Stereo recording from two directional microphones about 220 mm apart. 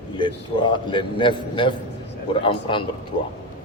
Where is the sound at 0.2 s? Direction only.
20° left (ahead or behind).